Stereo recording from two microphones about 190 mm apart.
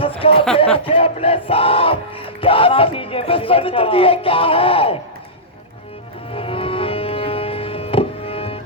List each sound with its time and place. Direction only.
0.0 s a sound: 30° left (ahead or behind)
0.9 s music: 30° left (ahead or behind)
6.3 s music: 30° left (ahead or behind)